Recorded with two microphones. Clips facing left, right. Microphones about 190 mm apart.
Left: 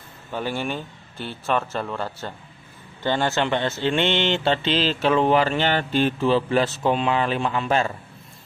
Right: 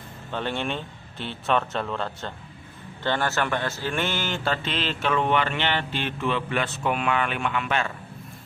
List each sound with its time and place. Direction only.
0.3 s speech: 5° left (ahead or behind)
3.0 s speech: 15° left (ahead or behind); by 7.9 s 35° left (ahead or behind)